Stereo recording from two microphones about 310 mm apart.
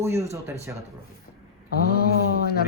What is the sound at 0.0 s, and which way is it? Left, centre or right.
Speech, centre.